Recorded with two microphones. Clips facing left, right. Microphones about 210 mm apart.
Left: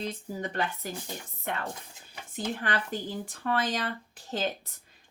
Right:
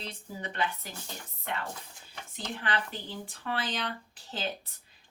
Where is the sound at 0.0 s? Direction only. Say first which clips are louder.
Left 6 dB; 45° left (ahead or behind).